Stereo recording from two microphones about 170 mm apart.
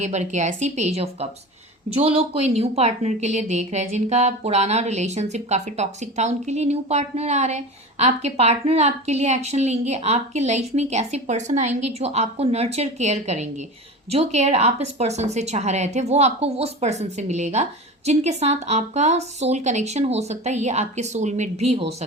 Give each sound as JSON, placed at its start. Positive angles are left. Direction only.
{"t": 0.0, "sound": "a woman's voice", "side_deg": -45}